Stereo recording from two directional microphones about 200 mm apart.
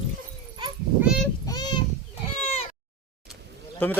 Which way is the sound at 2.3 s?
35° left (ahead or behind).